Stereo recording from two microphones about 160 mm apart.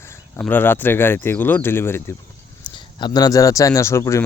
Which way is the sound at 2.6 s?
25° left (ahead or behind).